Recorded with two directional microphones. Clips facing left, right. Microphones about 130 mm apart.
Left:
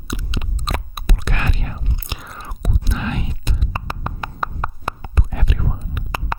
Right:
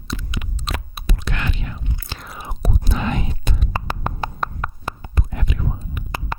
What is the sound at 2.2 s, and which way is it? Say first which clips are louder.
Whispering: right 1 dB; 5° right (ahead or behind).